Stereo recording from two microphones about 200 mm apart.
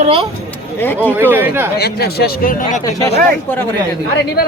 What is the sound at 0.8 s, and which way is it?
Speech, 10° left (ahead or behind).